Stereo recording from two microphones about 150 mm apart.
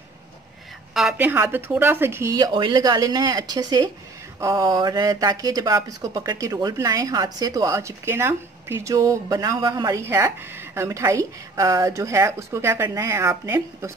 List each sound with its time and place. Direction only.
0.9 s a woman's voice: 5° right (ahead or behind)
2.3 s speech: 30° right (ahead or behind)